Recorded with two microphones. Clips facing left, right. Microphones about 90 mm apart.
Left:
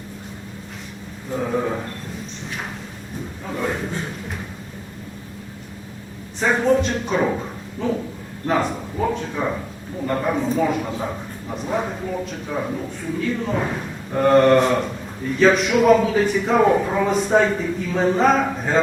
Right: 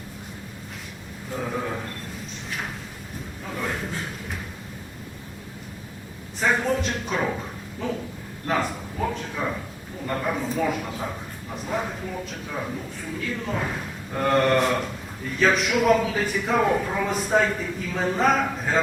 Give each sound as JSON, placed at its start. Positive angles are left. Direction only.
{"t": 1.3, "sound": "a man's voice", "side_deg": 5}
{"t": 3.5, "sound": "speech", "side_deg": 5}
{"t": 6.4, "sound": "speech", "side_deg": 0}
{"t": 8.4, "sound": "a man's voice", "side_deg": 5}